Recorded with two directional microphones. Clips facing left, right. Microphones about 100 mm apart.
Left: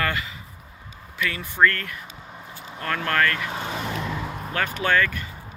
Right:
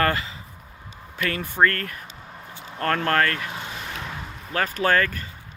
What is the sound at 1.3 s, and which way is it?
Speech, 50° right (ahead or behind).